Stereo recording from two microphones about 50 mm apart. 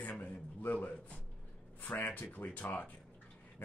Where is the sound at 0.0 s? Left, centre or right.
Left.